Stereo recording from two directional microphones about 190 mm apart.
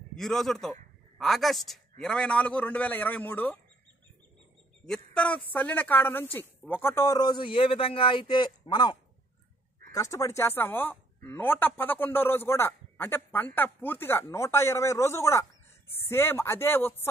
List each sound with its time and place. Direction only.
0.1 s a man's voice: centre (ahead or behind)
4.8 s speech: 5° left (ahead or behind)